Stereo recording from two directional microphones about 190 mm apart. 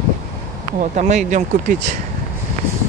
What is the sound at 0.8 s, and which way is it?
Speech, 40° right (ahead or behind).